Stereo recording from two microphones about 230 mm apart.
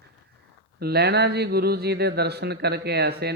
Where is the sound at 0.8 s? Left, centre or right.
Right.